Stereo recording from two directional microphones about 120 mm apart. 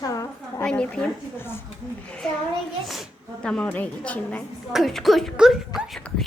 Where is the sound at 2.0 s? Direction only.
10° left (ahead or behind).